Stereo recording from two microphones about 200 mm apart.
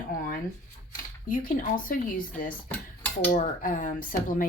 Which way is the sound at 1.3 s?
45° left (ahead or behind).